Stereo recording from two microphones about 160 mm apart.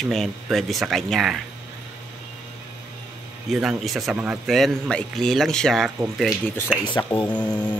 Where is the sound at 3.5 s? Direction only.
Centre (ahead or behind).